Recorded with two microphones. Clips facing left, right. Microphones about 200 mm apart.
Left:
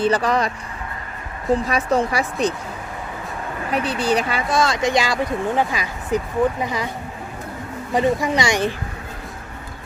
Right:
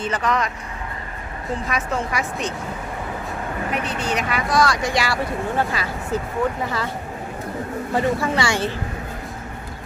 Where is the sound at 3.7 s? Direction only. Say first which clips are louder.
Left 7 dB; 35° left (ahead or behind); by 6.9 s 15° left (ahead or behind).